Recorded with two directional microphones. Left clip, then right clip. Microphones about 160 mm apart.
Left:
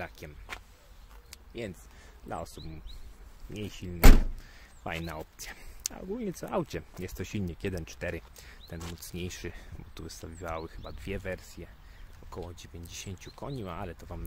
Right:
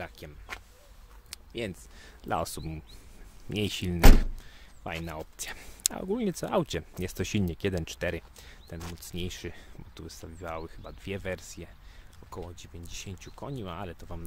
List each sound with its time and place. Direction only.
0.0 s speech: 10° right (ahead or behind)
1.3 s a sound: 35° right (ahead or behind)
2.2 s speech: 45° right (ahead or behind)
4.8 s speech: 10° right (ahead or behind)
5.2 s speech: 30° right (ahead or behind); by 11.2 s 5° right (ahead or behind)
11.2 s speech: 15° right (ahead or behind)
12.3 s speech: 5° right (ahead or behind)